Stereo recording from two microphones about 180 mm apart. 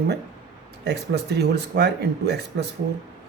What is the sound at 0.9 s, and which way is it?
Speech, 65° right (ahead or behind).